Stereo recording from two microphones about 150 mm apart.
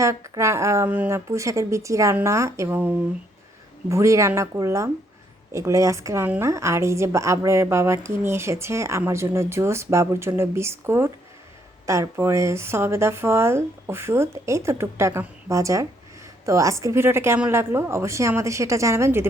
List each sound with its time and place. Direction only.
0.0 s a woman's voice: 20° right (ahead or behind)